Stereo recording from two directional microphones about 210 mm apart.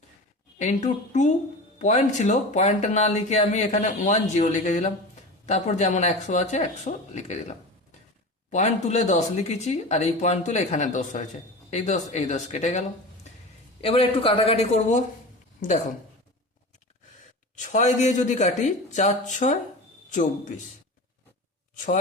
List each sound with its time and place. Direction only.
0.6 s speech: 35° left (ahead or behind)
13.8 s a man's voice: 25° left (ahead or behind)
17.6 s a man's voice: 35° left (ahead or behind)